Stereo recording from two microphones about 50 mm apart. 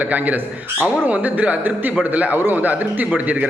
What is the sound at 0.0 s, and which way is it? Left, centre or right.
A man's voice, right.